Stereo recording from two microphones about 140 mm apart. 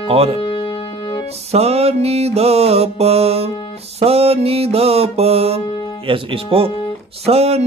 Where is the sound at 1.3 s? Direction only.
50° right (ahead or behind).